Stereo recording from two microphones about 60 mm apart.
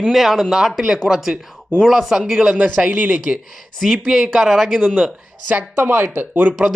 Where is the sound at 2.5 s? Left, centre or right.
Right.